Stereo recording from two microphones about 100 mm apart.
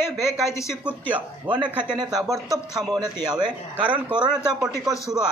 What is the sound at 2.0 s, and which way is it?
A man's voice, 40° right (ahead or behind).